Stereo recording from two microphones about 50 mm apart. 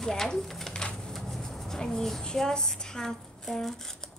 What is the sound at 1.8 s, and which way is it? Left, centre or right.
Speech, centre.